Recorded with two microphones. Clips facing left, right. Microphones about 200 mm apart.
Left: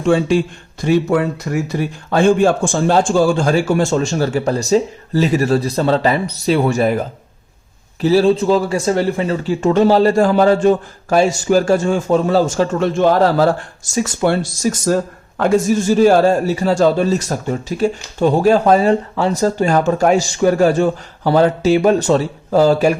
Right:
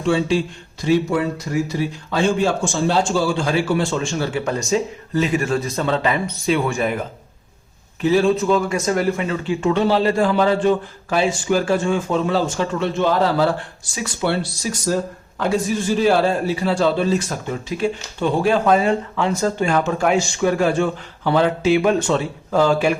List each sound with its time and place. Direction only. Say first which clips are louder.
0.0 s a man's voice: left 4 dB; 50° left (ahead or behind)
8.0 s a man's voice: left 4 dB; 35° left (ahead or behind)